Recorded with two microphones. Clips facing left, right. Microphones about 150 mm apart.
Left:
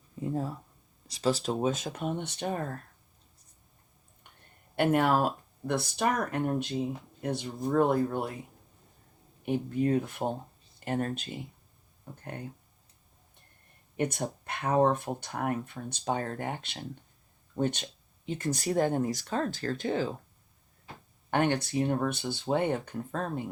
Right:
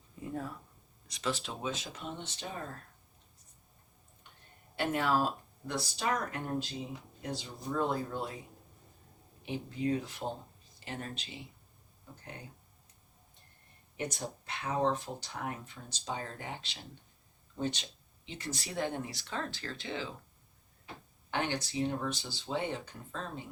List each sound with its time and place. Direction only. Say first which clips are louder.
0.2 s speech: left 7 dB; 25° left (ahead or behind); by 2.6 s 60° left (ahead or behind)
4.8 s speech: left 6 dB; 50° left (ahead or behind)
9.5 s speech: left 6 dB; 50° left (ahead or behind)
13.9 s speech: left 7 dB; 55° left (ahead or behind)
21.2 s speech: left 7 dB; 50° left (ahead or behind)